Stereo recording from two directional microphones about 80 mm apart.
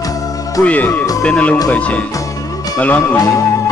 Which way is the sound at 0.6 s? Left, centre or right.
Centre.